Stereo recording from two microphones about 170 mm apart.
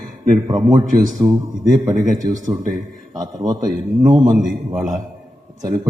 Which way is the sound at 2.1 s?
50° right (ahead or behind).